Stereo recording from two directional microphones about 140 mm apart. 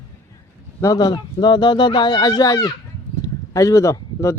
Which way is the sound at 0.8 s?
30° left (ahead or behind).